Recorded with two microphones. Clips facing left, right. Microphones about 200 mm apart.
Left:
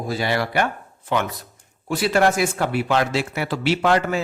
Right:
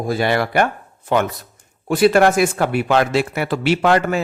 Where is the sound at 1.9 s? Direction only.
55° right (ahead or behind).